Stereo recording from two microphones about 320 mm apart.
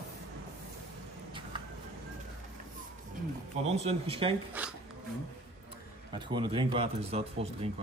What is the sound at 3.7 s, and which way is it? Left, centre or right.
Speech, centre.